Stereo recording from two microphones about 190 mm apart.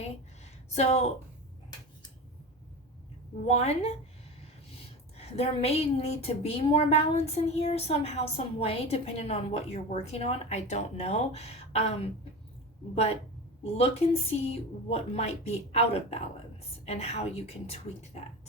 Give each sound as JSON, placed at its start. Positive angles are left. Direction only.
{"t": 0.8, "sound": "a woman's voice", "side_deg": 35}
{"t": 3.4, "sound": "a woman's voice", "side_deg": 35}
{"t": 13.7, "sound": "a woman's voice", "side_deg": 30}